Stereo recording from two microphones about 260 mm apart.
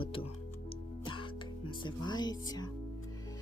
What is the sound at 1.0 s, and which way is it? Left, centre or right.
Music, centre.